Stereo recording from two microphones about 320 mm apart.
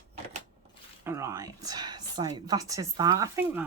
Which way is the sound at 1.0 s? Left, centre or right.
Centre.